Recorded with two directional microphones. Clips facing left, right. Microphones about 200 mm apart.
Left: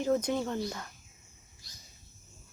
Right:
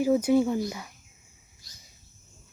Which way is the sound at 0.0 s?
10° right (ahead or behind).